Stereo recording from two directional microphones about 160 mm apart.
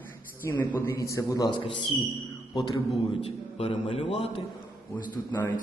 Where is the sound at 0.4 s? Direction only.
15° left (ahead or behind); by 2.0 s 30° left (ahead or behind).